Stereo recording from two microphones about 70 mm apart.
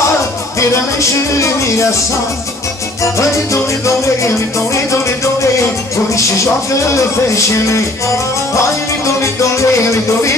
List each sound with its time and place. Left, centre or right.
0.6 s music: left
3.8 s music: left
8.5 s music: left